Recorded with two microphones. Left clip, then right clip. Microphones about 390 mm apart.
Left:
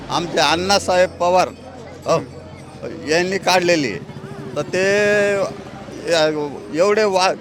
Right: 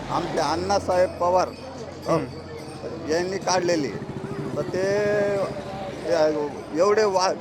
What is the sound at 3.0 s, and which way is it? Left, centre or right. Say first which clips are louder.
A man's voice: left 7 dB; left.